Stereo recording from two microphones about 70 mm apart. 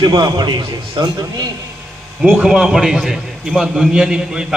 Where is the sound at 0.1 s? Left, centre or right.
Right.